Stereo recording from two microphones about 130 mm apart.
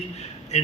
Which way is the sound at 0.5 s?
60° left (ahead or behind).